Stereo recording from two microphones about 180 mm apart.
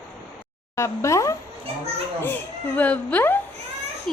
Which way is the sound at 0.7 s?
15° left (ahead or behind).